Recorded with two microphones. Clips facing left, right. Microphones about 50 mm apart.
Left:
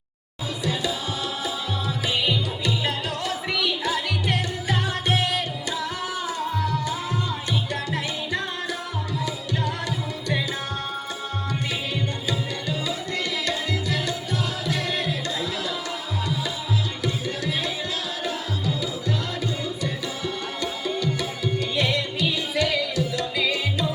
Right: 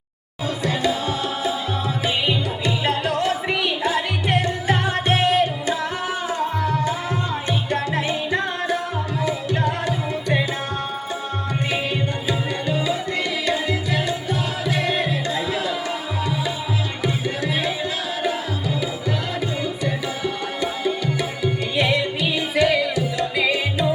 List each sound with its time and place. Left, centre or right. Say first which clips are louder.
0.6 s music: right 5 dB; right
6.2 s tabla: right 4 dB; right
7.7 s music: right 6 dB; right
12.3 s tabla: right 6 dB; right
13.4 s music: right 4 dB; right
17.0 s music: right 4 dB; right
18.2 s tabla: right 5 dB; right
20.6 s music: right 4 dB; right